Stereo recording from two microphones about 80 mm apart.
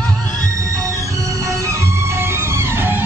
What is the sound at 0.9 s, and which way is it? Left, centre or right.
Music, right.